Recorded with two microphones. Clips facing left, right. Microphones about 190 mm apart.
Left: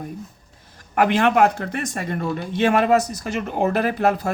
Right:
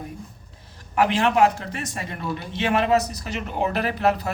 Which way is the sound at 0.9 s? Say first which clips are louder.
Left 2 dB; 55° left (ahead or behind).